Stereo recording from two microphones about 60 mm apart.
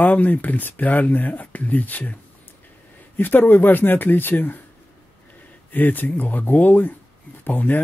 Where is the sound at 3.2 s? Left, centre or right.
Left.